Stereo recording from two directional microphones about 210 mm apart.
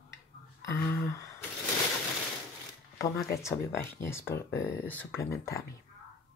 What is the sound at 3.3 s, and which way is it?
Speech, 10° left (ahead or behind).